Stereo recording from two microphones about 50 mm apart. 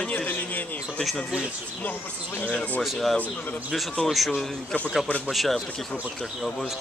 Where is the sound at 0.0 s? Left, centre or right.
Left.